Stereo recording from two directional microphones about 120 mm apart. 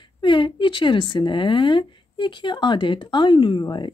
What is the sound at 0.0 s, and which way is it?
Speech, 45° left (ahead or behind).